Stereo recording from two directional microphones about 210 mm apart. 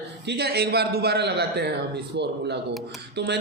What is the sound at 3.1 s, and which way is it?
Speech, 55° right (ahead or behind).